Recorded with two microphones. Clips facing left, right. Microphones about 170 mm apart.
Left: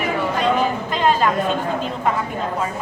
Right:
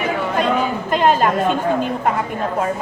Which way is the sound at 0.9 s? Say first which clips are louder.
Right 4 dB; 50° right (ahead or behind).